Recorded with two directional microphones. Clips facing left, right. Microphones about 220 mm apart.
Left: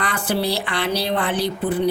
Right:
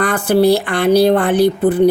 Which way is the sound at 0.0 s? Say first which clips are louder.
Right 10 dB; 45° right (ahead or behind).